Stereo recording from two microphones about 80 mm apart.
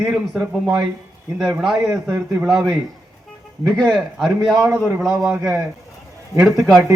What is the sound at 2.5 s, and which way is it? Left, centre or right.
Speech, right.